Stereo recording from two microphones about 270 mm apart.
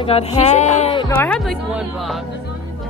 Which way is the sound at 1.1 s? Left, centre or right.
Centre.